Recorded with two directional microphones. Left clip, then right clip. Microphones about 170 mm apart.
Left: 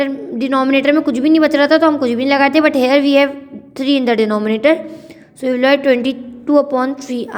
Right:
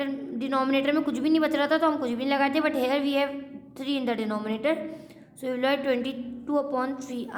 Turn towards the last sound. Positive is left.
turn(degrees=30)  # may be behind; listen again after turning